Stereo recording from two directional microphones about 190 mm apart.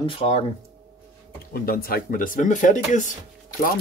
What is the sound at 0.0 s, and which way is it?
Speech, 30° left (ahead or behind).